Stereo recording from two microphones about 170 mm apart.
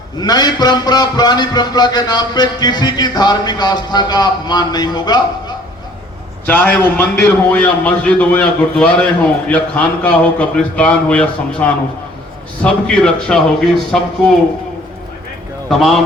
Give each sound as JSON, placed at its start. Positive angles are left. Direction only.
{"t": 0.2, "sound": "a man's voice", "side_deg": 25}
{"t": 6.4, "sound": "a man's voice", "side_deg": 10}
{"t": 15.7, "sound": "a man's voice", "side_deg": 0}